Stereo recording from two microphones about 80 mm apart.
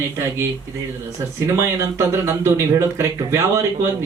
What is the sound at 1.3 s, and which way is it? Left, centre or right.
Speech, right.